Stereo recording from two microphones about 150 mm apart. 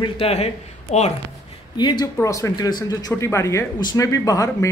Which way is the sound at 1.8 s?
30° left (ahead or behind).